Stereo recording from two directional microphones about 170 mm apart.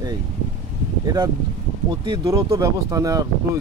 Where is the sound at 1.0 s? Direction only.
25° right (ahead or behind).